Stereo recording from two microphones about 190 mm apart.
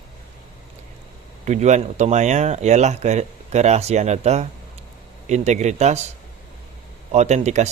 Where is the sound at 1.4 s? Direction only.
35° right (ahead or behind).